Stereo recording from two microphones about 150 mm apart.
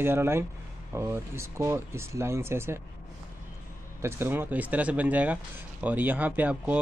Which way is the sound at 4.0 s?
15° right (ahead or behind).